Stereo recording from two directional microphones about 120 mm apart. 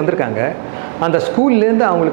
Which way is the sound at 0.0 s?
20° right (ahead or behind).